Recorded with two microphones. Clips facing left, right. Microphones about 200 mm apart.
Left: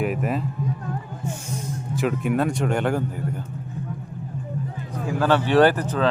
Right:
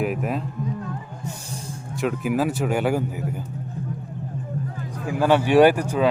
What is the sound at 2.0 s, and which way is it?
Speech, centre (ahead or behind).